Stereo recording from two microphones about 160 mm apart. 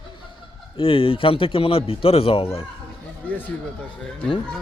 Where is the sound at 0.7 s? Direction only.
35° left (ahead or behind).